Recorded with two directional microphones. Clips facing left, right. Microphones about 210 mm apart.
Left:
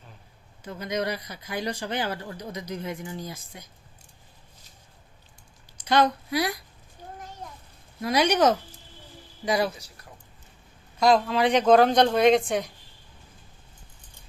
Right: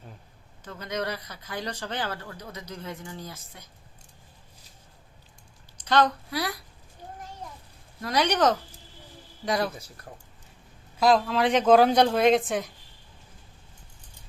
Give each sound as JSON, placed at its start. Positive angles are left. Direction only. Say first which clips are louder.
{"t": 0.6, "sound": "speech", "louder": "left 3 dB", "side_deg": 10}
{"t": 5.7, "sound": "speech", "louder": "left 1 dB", "side_deg": 10}
{"t": 8.0, "sound": "speech", "louder": "left 2 dB", "side_deg": 10}
{"t": 9.7, "sound": "speech", "louder": "right 4 dB", "side_deg": -55}
{"t": 10.9, "sound": "speech", "louder": "left 1 dB", "side_deg": 0}